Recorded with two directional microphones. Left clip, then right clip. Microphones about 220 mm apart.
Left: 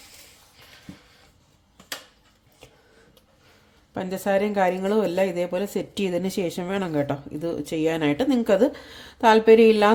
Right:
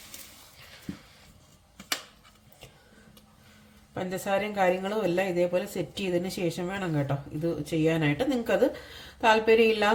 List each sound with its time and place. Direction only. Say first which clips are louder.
3.9 s speech: left 5 dB; 45° left (ahead or behind)